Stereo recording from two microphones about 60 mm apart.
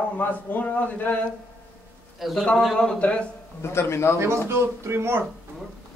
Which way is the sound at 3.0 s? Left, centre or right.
Centre.